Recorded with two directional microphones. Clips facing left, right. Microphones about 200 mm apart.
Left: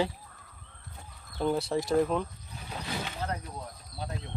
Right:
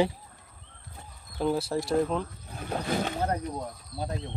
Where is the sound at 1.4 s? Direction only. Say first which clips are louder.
Right 1 dB; centre (ahead or behind).